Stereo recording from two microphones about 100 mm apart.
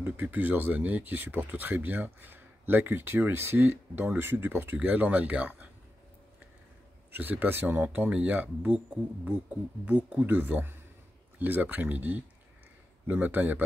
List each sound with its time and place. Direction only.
0.0 s speech: 15° right (ahead or behind)
7.1 s speech: 20° right (ahead or behind)